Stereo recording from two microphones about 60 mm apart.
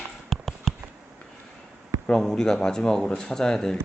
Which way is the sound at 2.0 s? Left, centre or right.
Centre.